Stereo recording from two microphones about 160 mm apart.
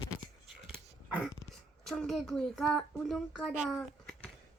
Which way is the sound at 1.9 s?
Centre (ahead or behind).